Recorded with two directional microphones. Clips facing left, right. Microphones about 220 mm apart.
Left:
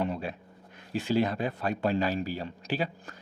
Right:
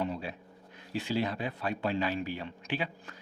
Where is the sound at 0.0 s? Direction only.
55° left (ahead or behind).